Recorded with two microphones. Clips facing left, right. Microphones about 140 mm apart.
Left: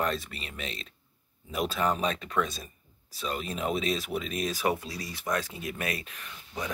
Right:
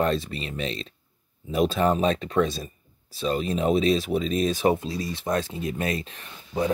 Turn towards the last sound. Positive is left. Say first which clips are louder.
# right 10 dB
turn(degrees=-30)  # may be behind; listen again after turning